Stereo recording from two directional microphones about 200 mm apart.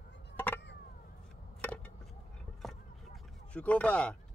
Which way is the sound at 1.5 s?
5° left (ahead or behind).